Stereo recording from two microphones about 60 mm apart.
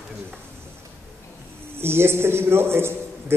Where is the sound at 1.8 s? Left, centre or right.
Right.